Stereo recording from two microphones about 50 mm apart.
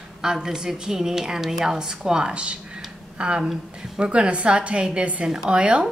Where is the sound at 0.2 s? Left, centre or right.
Centre.